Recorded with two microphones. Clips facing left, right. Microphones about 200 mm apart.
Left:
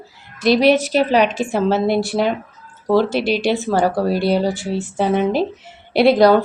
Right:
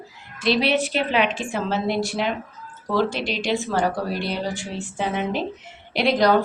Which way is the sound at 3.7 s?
30° left (ahead or behind).